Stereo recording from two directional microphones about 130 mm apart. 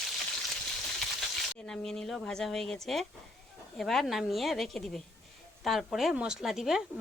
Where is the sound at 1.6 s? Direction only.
5° left (ahead or behind).